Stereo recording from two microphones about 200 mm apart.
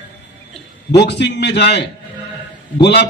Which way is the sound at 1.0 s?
60° left (ahead or behind).